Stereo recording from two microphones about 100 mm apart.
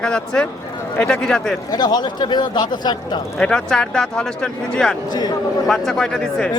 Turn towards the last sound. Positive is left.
turn(degrees=5)  # may be behind; listen again after turning